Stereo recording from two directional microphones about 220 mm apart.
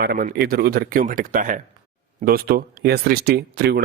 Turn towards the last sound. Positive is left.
turn(degrees=-45)  # may be behind; listen again after turning